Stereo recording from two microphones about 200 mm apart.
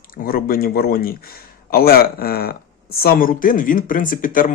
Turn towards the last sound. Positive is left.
turn(degrees=45)  # may be behind; listen again after turning